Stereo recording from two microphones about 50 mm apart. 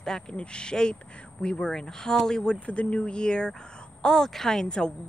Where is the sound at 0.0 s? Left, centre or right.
Centre.